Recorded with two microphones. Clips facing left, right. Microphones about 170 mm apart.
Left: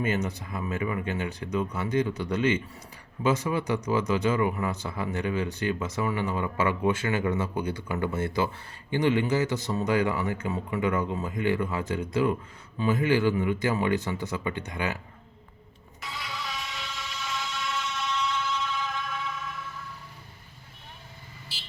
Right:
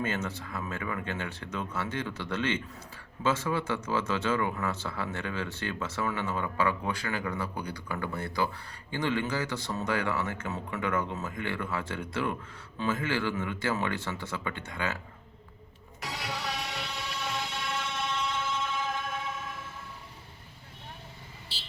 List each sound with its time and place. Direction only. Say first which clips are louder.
0.0 s speech: left 4 dB; 15° left (ahead or behind)
16.0 s music: right 1 dB; 70° right (ahead or behind); by 19.7 s 50° right (ahead or behind)